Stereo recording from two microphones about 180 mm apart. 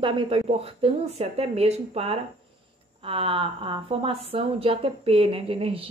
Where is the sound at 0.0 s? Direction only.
25° right (ahead or behind).